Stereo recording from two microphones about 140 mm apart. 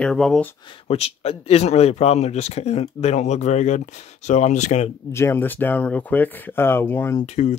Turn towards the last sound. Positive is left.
turn(degrees=50)  # may be behind; listen again after turning